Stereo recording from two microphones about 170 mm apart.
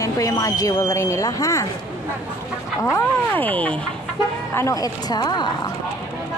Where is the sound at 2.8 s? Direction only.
15° left (ahead or behind).